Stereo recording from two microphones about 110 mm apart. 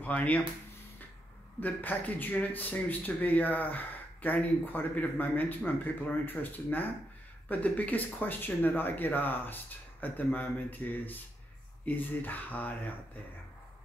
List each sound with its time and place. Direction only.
0.0 s speech: 15° left (ahead or behind)
1.6 s speech: 15° left (ahead or behind)